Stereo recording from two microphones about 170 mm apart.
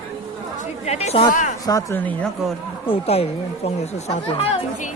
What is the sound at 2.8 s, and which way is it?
Speech, 35° left (ahead or behind).